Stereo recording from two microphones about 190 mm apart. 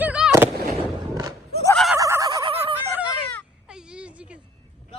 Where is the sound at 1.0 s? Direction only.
20° right (ahead or behind).